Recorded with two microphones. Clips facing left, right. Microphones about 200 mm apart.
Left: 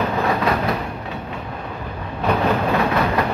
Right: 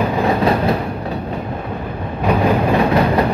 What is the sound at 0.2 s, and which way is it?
Train, 30° right (ahead or behind).